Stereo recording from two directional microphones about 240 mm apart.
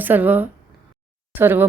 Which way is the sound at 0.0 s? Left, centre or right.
Centre.